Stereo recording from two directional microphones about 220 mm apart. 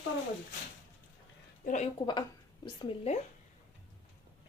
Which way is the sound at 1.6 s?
35° left (ahead or behind).